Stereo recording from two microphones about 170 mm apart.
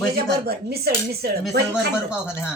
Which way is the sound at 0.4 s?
65° right (ahead or behind).